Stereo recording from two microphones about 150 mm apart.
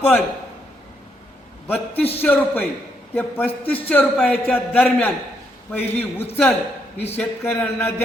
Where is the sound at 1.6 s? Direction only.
10° left (ahead or behind).